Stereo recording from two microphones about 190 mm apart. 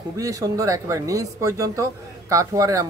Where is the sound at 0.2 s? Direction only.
20° right (ahead or behind).